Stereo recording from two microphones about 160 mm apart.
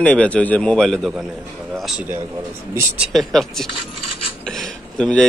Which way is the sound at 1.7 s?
Centre (ahead or behind).